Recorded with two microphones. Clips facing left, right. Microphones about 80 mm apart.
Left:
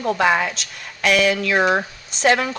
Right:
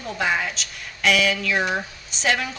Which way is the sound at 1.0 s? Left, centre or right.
Left.